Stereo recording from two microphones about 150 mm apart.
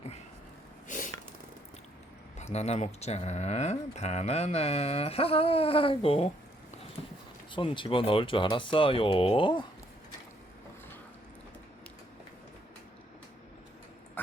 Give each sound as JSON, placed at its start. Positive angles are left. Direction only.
{"t": 0.9, "sound": "snort", "side_deg": 60}
{"t": 2.4, "sound": "speech", "side_deg": 45}
{"t": 7.5, "sound": "speech", "side_deg": 35}